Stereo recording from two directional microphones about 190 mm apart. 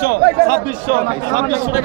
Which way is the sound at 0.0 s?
55° right (ahead or behind).